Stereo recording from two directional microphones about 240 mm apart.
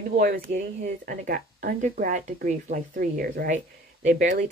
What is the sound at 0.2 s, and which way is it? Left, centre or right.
Speech, right.